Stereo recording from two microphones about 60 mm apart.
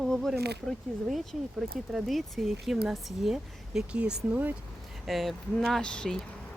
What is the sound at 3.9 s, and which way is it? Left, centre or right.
Speech, centre.